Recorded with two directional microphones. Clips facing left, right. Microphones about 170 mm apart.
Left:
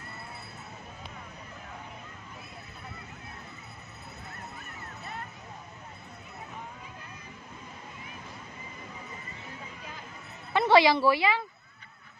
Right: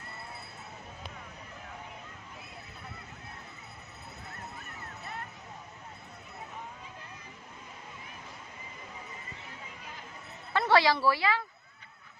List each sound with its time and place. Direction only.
10.5 s speech: 20° left (ahead or behind)